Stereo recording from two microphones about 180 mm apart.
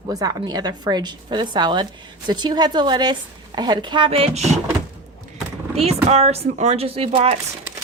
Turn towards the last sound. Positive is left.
turn(degrees=-35)  # may be behind; listen again after turning